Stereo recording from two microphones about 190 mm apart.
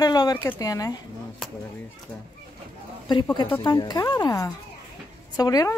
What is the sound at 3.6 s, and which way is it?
Speech, 20° left (ahead or behind).